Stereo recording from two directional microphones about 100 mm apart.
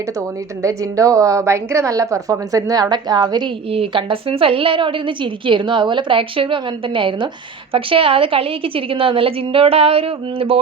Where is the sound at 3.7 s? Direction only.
65° right (ahead or behind).